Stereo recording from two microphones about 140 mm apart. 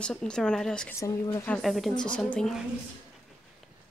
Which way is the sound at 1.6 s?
Centre (ahead or behind).